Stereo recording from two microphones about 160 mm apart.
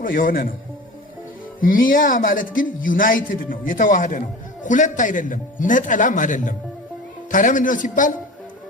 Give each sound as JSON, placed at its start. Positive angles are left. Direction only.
{"t": 0.0, "sound": "a man's voice", "side_deg": 60}
{"t": 1.6, "sound": "a man's voice", "side_deg": 60}